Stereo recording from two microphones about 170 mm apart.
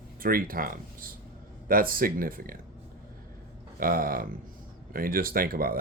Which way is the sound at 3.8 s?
60° right (ahead or behind).